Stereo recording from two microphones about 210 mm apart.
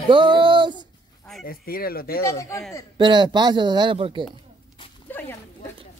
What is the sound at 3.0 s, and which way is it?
Speech, 20° right (ahead or behind).